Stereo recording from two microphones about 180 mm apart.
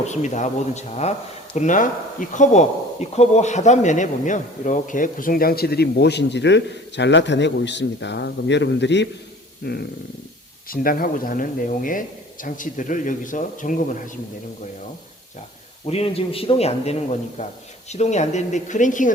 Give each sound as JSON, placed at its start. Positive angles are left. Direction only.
{"t": 0.1, "sound": "a man's voice", "side_deg": 40}
{"t": 9.6, "sound": "speech", "side_deg": 65}
{"t": 10.7, "sound": "speech", "side_deg": 50}
{"t": 15.9, "sound": "a man's voice", "side_deg": 35}